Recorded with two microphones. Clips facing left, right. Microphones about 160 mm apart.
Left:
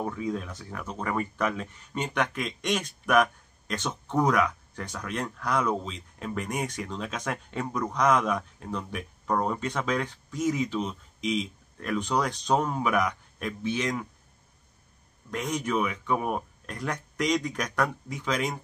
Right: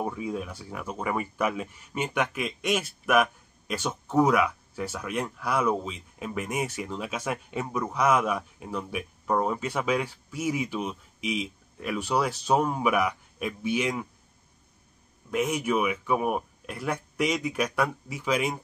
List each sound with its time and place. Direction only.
0.0 s speech: 10° right (ahead or behind)
15.3 s speech: 10° right (ahead or behind)